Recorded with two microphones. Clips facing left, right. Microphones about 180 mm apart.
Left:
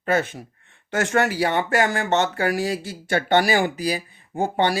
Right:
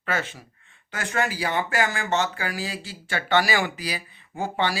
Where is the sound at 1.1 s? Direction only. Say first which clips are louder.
Left 4 dB; 65° left (ahead or behind).